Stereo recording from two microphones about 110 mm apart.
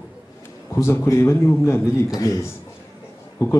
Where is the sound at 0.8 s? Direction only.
25° left (ahead or behind).